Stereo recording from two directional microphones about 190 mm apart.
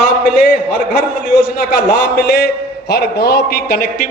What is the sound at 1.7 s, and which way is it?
A man's voice, 55° left (ahead or behind).